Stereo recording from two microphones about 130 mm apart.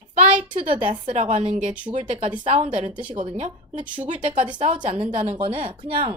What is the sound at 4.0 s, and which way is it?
A woman's voice, 65° right (ahead or behind).